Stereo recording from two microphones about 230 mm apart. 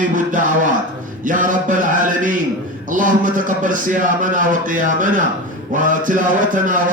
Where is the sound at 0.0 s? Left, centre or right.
Right.